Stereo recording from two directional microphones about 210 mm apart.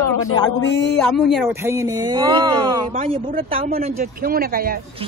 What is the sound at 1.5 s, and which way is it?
Speech, 10° right (ahead or behind).